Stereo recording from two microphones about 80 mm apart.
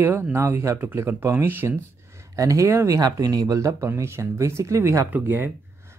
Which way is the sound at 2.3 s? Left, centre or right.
Right.